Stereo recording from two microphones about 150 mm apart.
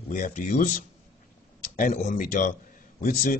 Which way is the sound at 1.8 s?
60° left (ahead or behind).